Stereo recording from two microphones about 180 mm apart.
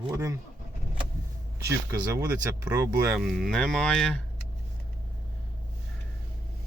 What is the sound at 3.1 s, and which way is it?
Speech, centre (ahead or behind).